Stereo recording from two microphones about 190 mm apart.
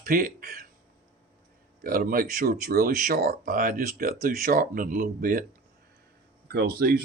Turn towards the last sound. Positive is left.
turn(degrees=-55)  # may be behind; listen again after turning